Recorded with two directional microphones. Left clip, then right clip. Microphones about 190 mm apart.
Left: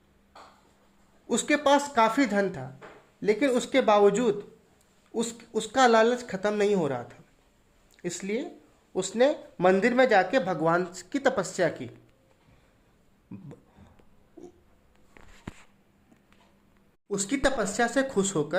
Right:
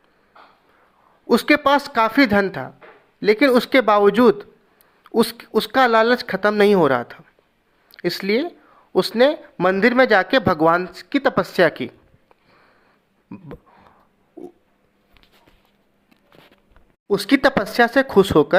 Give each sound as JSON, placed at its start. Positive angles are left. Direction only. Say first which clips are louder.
{"t": 1.3, "sound": "speech", "louder": "right 8 dB", "side_deg": -20}
{"t": 13.3, "sound": "speech", "louder": "right 7 dB", "side_deg": -15}
{"t": 14.4, "sound": "a sound", "louder": "right 10 dB", "side_deg": -35}
{"t": 17.1, "sound": "speech", "louder": "right 10 dB", "side_deg": -30}